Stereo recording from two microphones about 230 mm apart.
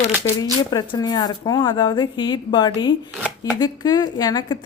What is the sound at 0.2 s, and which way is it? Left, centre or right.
Speech, centre.